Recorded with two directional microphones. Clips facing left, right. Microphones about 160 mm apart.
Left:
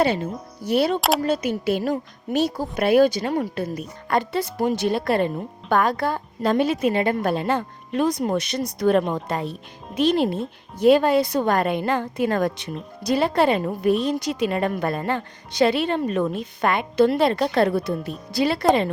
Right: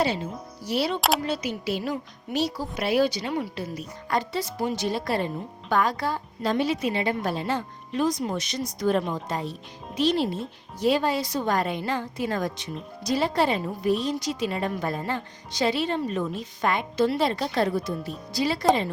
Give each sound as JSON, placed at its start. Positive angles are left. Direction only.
{"t": 0.0, "sound": "a woman's voice", "side_deg": 55}